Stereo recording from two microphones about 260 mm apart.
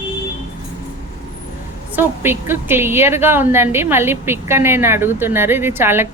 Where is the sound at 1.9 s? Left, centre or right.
Centre.